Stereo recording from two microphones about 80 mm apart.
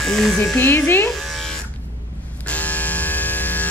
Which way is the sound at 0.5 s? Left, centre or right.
Left.